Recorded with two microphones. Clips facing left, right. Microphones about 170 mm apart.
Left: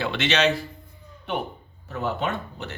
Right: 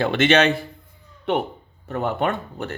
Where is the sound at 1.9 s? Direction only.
60° right (ahead or behind).